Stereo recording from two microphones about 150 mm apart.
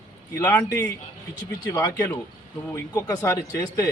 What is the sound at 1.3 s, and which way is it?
Speech, 25° left (ahead or behind).